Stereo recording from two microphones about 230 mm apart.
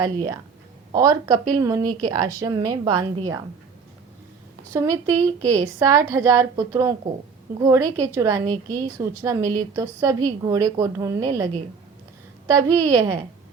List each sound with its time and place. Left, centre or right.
0.0 s a woman's voice: centre
4.7 s a woman's voice: centre